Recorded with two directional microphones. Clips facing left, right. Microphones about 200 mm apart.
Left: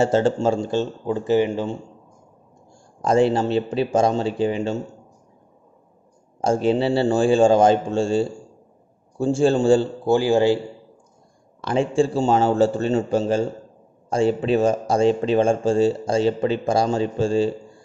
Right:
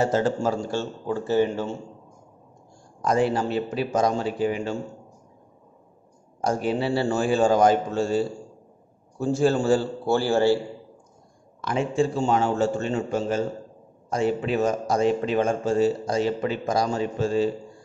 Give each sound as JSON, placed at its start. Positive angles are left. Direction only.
{"t": 0.0, "sound": "speech", "side_deg": 25}
{"t": 3.0, "sound": "speech", "side_deg": 25}
{"t": 6.4, "sound": "speech", "side_deg": 25}
{"t": 11.6, "sound": "a man's voice", "side_deg": 30}